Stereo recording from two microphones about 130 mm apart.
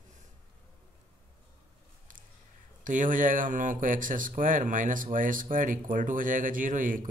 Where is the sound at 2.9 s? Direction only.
85° right.